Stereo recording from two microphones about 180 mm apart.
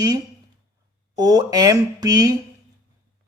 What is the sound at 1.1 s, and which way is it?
A man's voice, 20° right (ahead or behind).